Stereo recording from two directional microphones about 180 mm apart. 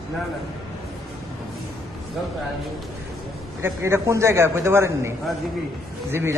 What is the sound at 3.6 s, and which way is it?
A man's voice, 15° right (ahead or behind).